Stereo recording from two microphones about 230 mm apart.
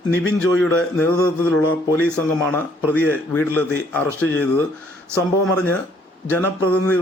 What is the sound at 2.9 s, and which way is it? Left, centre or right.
A man's voice, centre.